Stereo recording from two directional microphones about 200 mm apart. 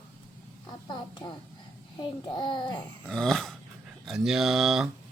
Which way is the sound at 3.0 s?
5° left (ahead or behind).